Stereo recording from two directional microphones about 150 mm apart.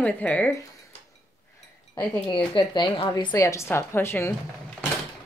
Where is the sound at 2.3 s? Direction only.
30° left (ahead or behind); by 4.3 s 15° left (ahead or behind).